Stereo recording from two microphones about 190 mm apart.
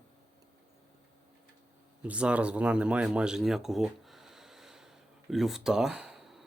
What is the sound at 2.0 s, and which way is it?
Speech, 5° right (ahead or behind).